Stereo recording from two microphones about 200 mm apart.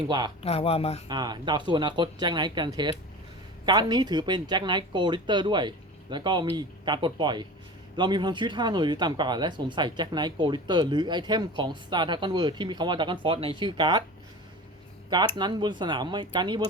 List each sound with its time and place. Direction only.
0.4 s speech: 30° left (ahead or behind)
1.0 s speech: 20° right (ahead or behind)
15.4 s speech: 20° right (ahead or behind)